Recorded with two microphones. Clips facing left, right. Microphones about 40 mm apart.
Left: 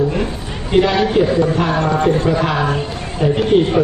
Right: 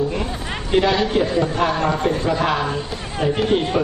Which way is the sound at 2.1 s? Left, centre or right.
Left.